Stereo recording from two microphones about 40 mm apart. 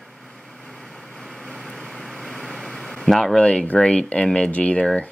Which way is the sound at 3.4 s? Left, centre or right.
Left.